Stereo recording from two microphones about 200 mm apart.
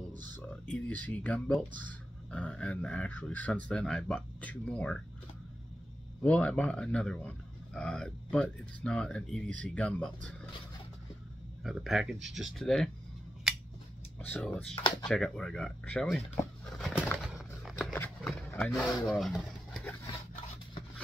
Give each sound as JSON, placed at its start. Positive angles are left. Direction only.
{"t": 0.4, "sound": "speech", "side_deg": 5}
{"t": 6.2, "sound": "speech", "side_deg": 5}
{"t": 11.6, "sound": "speech", "side_deg": 0}
{"t": 13.5, "sound": "scissors", "side_deg": 0}
{"t": 14.2, "sound": "speech", "side_deg": 5}
{"t": 16.7, "sound": "bird", "side_deg": 0}
{"t": 17.2, "sound": "a sound", "side_deg": 0}
{"t": 17.9, "sound": "a sound", "side_deg": 10}